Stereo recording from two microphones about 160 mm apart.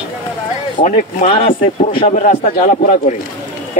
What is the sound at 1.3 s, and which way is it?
Speech, 50° left (ahead or behind).